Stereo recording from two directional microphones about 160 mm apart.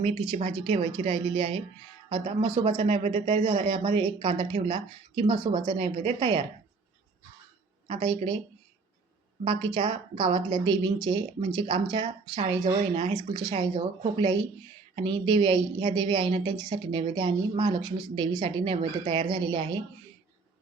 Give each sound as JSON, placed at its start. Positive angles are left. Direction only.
{"t": 0.0, "sound": "speech", "side_deg": -35}
{"t": 7.9, "sound": "speech", "side_deg": -30}
{"t": 9.4, "sound": "speech", "side_deg": -35}